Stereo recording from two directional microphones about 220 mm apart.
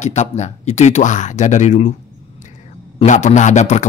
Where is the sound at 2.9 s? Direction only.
30° left (ahead or behind).